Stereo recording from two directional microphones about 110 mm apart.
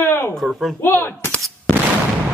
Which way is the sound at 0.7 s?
20° left (ahead or behind).